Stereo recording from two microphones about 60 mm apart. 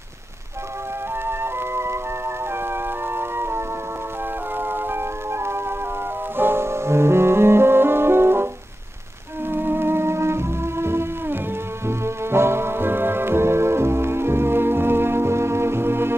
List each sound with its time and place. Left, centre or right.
1.2 s music: right
9.5 s music: right